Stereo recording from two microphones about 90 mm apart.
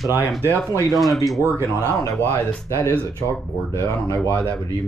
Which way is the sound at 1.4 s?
30° right (ahead or behind).